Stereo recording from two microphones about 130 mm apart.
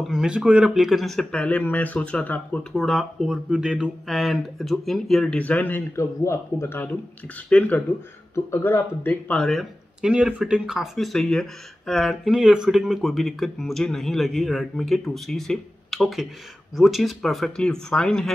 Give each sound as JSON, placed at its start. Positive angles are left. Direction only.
{"t": 0.0, "sound": "speech", "side_deg": -5}
{"t": 2.7, "sound": "speech", "side_deg": 0}
{"t": 10.0, "sound": "speech", "side_deg": -5}